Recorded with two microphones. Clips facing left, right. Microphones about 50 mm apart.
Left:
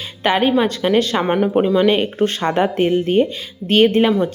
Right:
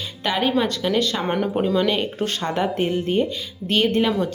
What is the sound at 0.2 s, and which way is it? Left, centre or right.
Speech, left.